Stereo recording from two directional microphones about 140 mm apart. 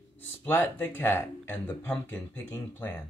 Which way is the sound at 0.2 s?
15° left (ahead or behind).